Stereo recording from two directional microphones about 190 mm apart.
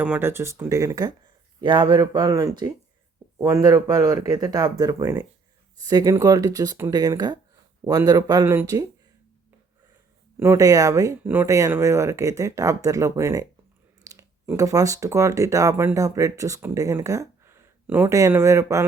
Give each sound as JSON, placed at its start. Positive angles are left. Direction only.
{"t": 0.0, "sound": "speech", "side_deg": -10}
{"t": 10.3, "sound": "speech", "side_deg": -15}